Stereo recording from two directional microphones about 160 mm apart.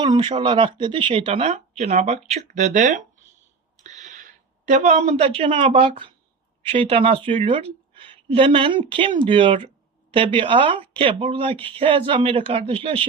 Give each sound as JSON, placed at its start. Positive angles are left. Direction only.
{"t": 0.0, "sound": "speech", "side_deg": -30}
{"t": 3.8, "sound": "a sound", "side_deg": -50}
{"t": 4.7, "sound": "a woman's voice", "side_deg": -45}